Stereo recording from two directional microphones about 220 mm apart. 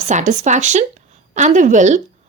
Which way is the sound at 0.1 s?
35° right (ahead or behind).